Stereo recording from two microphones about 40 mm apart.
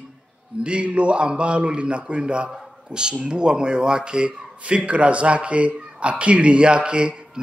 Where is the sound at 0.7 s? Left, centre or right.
Right.